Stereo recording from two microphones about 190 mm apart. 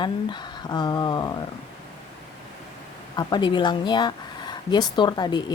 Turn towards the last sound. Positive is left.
turn(degrees=25)  # may be behind; listen again after turning